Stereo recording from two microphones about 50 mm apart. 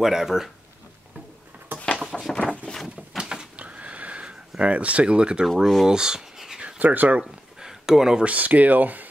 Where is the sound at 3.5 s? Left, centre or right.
Right; by 6.6 s centre.